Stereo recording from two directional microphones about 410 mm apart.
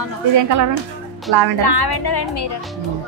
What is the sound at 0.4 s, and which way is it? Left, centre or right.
Speech, right.